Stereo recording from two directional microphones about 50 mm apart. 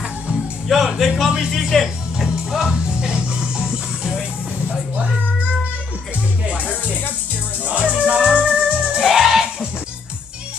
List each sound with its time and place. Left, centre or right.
0.7 s music: centre
1.5 s speech: centre
2.1 s music: centre
6.4 s music: right; by 9.5 s centre